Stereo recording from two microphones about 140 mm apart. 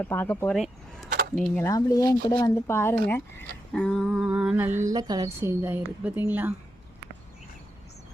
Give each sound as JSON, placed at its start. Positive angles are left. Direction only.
{"t": 0.0, "sound": "speech", "side_deg": 15}
{"t": 1.5, "sound": "speech", "side_deg": 20}
{"t": 3.7, "sound": "a sound", "side_deg": 5}